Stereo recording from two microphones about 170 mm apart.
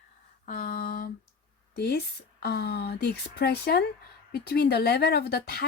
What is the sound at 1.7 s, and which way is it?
Speech, 70° left (ahead or behind).